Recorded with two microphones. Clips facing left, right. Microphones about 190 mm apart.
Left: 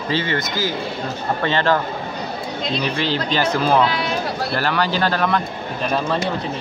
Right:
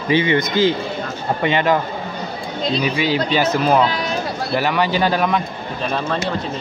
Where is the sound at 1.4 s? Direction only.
10° right (ahead or behind).